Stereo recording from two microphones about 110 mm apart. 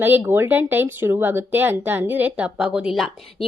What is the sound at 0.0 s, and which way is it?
Speech, 20° right (ahead or behind).